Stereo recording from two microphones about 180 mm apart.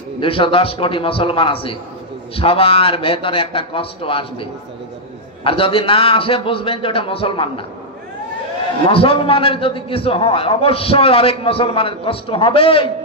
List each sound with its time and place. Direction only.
0.2 s a man's voice: 30° left (ahead or behind)
8.8 s a man's voice: 30° left (ahead or behind)